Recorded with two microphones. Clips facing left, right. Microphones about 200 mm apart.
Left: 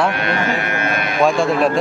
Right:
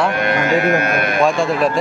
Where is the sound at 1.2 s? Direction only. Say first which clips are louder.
Left 2 dB; centre (ahead or behind).